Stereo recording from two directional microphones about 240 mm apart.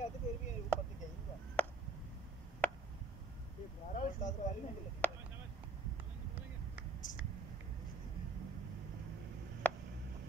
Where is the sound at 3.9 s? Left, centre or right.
Left.